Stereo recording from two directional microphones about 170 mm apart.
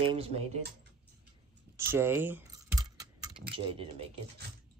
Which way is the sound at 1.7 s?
15° right (ahead or behind).